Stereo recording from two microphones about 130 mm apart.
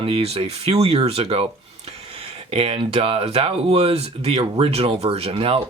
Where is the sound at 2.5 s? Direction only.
45° right (ahead or behind).